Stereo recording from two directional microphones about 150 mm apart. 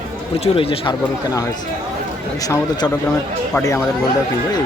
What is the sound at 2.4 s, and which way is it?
Speech, 25° left (ahead or behind).